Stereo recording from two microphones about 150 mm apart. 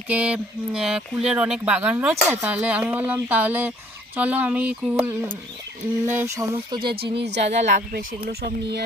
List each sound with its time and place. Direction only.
0.1 s speech: 10° right (ahead or behind)
7.1 s a woman's voice: 45° right (ahead or behind)
7.9 s speech: 90° right